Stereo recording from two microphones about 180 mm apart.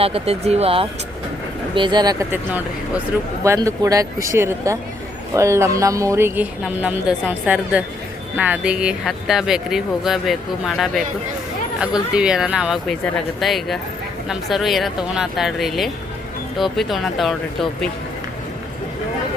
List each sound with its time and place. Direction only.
0.0 s speech: 35° right (ahead or behind)
2.3 s speech: 10° right (ahead or behind)
12.1 s speech: 5° right (ahead or behind)